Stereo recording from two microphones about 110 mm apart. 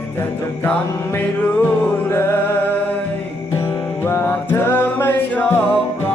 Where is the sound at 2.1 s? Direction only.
25° left (ahead or behind).